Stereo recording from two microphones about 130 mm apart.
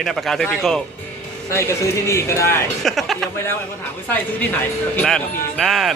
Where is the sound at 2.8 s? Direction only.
Centre (ahead or behind).